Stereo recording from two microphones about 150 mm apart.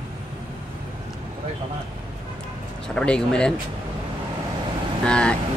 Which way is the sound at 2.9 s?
5° left (ahead or behind).